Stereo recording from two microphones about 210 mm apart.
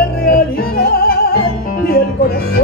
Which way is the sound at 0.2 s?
45° left (ahead or behind).